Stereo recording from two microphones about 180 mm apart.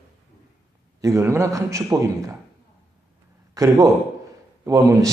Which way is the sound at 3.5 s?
20° right (ahead or behind).